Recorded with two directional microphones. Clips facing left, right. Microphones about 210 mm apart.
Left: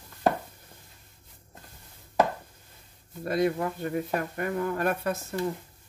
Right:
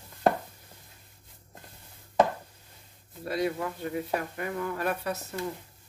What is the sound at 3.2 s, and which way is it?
Speech, 50° left (ahead or behind).